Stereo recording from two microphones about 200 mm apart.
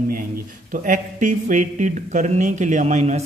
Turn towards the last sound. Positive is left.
turn(degrees=-35)  # may be behind; listen again after turning